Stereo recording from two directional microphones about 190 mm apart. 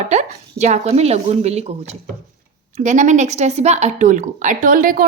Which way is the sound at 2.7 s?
40° right (ahead or behind).